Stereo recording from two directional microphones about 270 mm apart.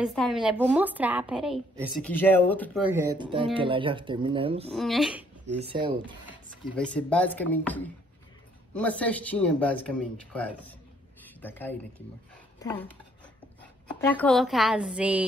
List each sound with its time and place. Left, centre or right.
0.0 s a woman's voice: centre
2.8 s speech: centre
4.7 s a woman's voice: centre
5.5 s speech: right
6.7 s a woman's voice: centre
13.8 s a woman's voice: centre